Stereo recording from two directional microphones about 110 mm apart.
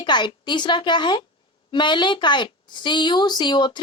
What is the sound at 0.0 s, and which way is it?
Speech, 45° left (ahead or behind).